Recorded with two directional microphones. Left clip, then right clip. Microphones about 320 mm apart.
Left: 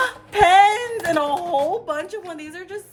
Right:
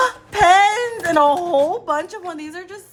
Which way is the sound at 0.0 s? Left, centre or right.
Right.